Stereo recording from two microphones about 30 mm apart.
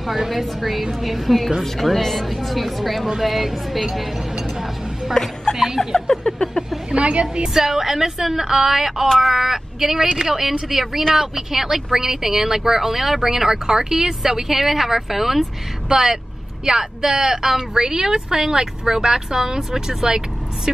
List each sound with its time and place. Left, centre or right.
0.0 s speech: centre
4.4 s a sound: centre
5.1 s a woman's voice: centre
5.9 s a sound: centre
6.9 s speech: right
7.4 s speech: centre
15.9 s speech: centre